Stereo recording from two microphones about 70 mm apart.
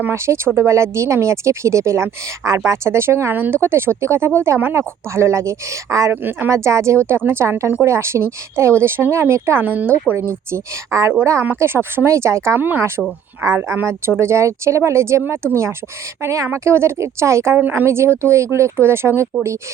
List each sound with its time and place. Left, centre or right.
0.1 s speech: right
6.1 s a woman's voice: right
6.5 s speech: right
7.1 s speech: right
9.6 s a woman's voice: right
10.1 s speech: right
12.1 s speech: right
12.5 s a woman's voice: right
13.4 s speech: right
17.6 s a woman's voice: right
17.8 s speech: right